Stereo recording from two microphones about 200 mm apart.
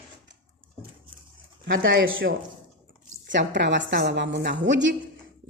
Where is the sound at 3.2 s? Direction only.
65° right (ahead or behind).